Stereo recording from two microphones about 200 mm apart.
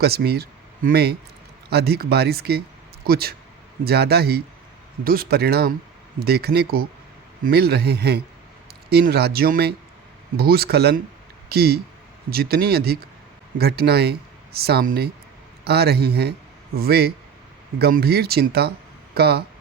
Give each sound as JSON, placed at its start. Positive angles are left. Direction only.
{"t": 0.0, "sound": "speech", "side_deg": -50}